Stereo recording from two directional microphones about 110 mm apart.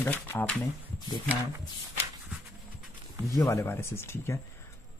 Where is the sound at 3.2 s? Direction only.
30° left (ahead or behind).